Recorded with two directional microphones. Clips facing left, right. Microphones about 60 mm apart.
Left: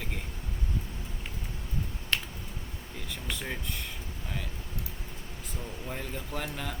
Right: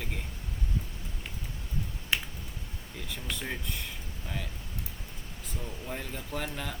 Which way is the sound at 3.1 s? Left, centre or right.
Centre.